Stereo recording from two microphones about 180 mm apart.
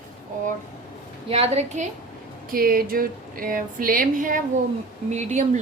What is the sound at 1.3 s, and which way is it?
Speech, 35° right (ahead or behind).